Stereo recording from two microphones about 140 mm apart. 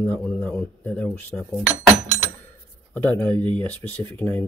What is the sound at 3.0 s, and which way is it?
Speech, 10° left (ahead or behind).